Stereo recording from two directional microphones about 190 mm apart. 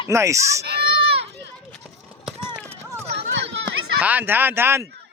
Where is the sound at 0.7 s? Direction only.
55° right (ahead or behind).